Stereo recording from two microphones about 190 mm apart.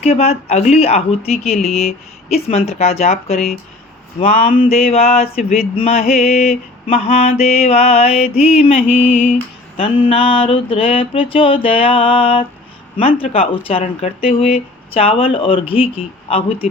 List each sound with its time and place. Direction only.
0.0 s mantra: 30° left (ahead or behind)
9.7 s speech: 30° left (ahead or behind)